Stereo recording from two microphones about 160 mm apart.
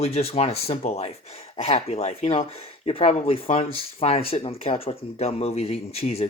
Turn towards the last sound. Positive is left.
turn(degrees=40)  # may be behind; listen again after turning